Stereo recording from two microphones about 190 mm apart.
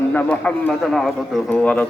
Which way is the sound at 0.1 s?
10° left (ahead or behind).